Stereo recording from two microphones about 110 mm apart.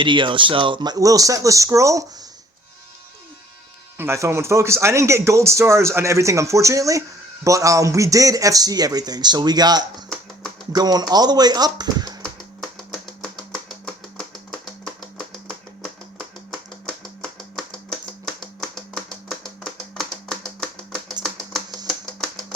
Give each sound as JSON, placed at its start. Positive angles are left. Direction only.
{"t": 0.0, "sound": "a man's voice", "side_deg": -45}
{"t": 3.9, "sound": "a man's voice", "side_deg": -25}
{"t": 12.9, "sound": "typewriter", "side_deg": 0}
{"t": 15.4, "sound": "finger snapping", "side_deg": 5}
{"t": 18.3, "sound": "a sound", "side_deg": 0}
{"t": 21.8, "sound": "typewriter", "side_deg": 0}